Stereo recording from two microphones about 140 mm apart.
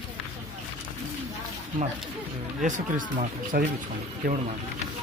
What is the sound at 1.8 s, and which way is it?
Speech, 60° right (ahead or behind).